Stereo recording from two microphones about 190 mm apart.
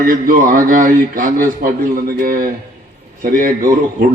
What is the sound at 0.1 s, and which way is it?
A man's voice, 45° right (ahead or behind).